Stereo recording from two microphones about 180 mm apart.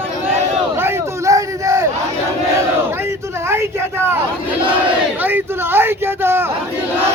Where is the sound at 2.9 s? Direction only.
15° right (ahead or behind).